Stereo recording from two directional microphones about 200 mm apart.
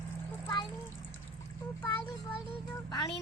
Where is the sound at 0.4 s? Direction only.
20° left (ahead or behind).